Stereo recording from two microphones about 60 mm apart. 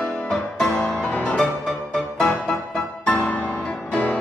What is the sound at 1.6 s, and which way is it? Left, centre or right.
Music, centre.